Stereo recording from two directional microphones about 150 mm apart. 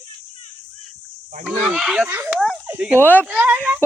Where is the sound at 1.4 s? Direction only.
5° right (ahead or behind).